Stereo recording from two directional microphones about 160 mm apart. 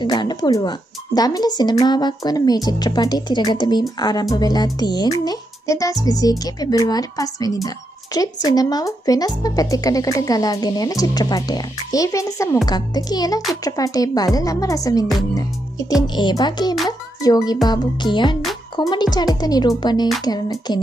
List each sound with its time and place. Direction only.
0.0 s speech: 25° left (ahead or behind)
16.2 s speech: 30° left (ahead or behind)